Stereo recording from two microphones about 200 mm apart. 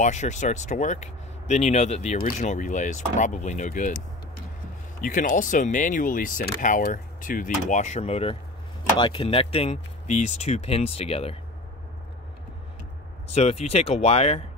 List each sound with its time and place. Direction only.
0.0 s speech: 35° left (ahead or behind)
5.0 s speech: 40° left (ahead or behind)
13.3 s speech: 35° left (ahead or behind)